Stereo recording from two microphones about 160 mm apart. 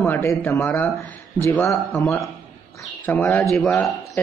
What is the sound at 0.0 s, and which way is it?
Speech, 15° left (ahead or behind).